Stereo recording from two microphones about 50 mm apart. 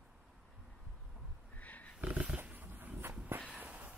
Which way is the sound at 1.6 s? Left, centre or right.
Left.